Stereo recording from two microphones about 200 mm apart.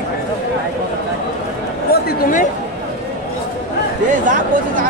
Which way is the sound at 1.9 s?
50° left (ahead or behind).